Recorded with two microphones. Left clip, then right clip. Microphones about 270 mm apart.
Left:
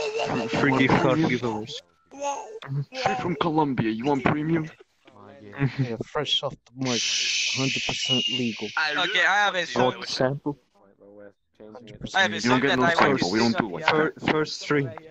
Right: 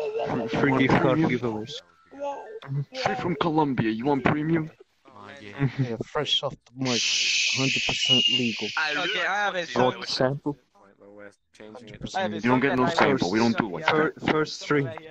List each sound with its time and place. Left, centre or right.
0.0 s a sound: left
0.5 s a man's voice: centre
2.1 s music: left
2.6 s speech: centre
3.0 s a man's voice: centre
5.5 s speech: centre
8.7 s a man's voice: centre
9.1 s a man's voice: left; by 10.6 s centre
12.2 s speech: left
12.4 s speech: centre
13.0 s a man's voice: centre